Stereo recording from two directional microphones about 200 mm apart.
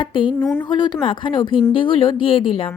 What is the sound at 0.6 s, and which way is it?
Speech, 20° left (ahead or behind).